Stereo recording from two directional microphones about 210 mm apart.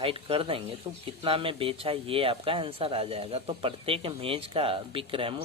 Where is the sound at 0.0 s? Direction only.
25° right (ahead or behind).